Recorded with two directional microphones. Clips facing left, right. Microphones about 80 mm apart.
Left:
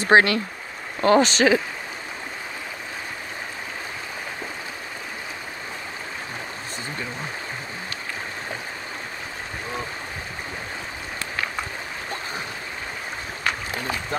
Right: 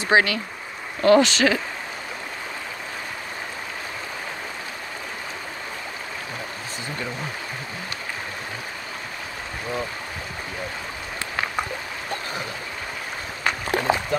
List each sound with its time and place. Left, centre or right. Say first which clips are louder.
0.0 s speech: left 3 dB; left
1.0 s speech: right 1 dB; left
13.9 s a sound: right 8 dB; right